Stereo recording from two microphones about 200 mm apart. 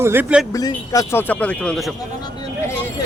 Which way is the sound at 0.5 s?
20° left (ahead or behind).